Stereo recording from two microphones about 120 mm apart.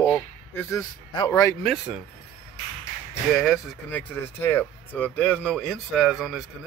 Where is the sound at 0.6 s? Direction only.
20° left (ahead or behind).